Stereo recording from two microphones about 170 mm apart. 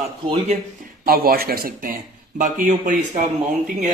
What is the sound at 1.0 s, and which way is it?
Speech, 60° right (ahead or behind).